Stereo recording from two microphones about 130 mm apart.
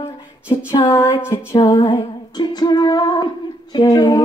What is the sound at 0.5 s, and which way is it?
Female singing, 40° left (ahead or behind).